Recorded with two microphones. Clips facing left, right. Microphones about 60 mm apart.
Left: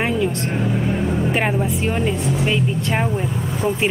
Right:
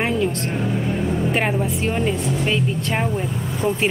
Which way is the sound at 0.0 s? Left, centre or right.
Centre.